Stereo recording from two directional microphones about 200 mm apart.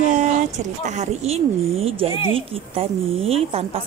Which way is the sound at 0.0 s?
35° right (ahead or behind).